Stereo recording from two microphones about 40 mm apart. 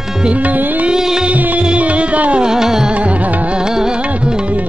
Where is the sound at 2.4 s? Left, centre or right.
Centre.